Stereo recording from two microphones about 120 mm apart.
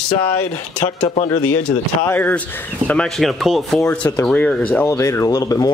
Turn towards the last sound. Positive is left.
turn(degrees=30)  # may be behind; listen again after turning